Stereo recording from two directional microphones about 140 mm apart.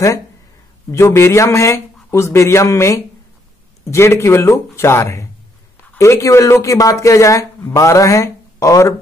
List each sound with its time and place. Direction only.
0.9 s speech: 20° left (ahead or behind)